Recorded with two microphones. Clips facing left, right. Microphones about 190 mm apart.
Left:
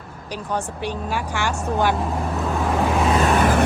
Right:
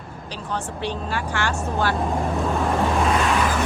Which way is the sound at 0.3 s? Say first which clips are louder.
Left 3 dB; 10° left (ahead or behind).